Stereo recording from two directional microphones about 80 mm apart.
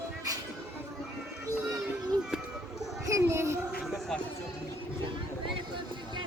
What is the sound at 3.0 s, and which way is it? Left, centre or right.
Child singing, right.